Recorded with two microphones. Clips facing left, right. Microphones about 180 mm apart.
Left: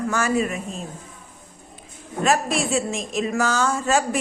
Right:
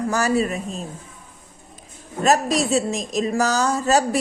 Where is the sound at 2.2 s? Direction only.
40° right (ahead or behind).